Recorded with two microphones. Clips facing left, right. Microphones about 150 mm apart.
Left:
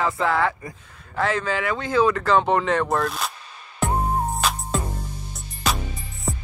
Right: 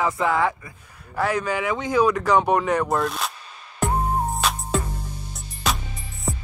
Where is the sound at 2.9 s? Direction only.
Centre (ahead or behind).